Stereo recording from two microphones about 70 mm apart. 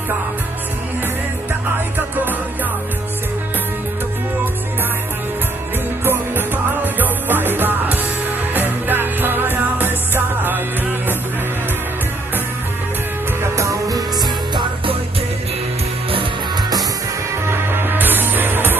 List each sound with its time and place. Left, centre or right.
6.0 s music: right
13.6 s music: right
17.5 s music: right